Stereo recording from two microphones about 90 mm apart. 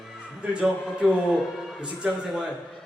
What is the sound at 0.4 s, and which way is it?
A man's voice, 10° right (ahead or behind).